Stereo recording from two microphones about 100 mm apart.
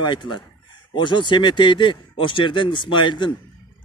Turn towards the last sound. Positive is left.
turn(degrees=50)  # may be behind; listen again after turning